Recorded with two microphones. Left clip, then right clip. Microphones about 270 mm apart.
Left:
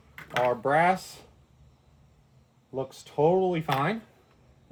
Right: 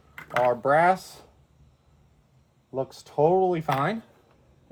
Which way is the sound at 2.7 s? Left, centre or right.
Centre.